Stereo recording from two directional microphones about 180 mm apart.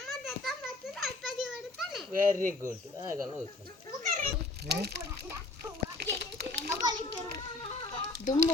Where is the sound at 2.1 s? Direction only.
50° right (ahead or behind).